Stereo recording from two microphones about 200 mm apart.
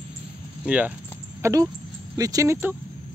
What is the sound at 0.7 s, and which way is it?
Speech, 5° right (ahead or behind).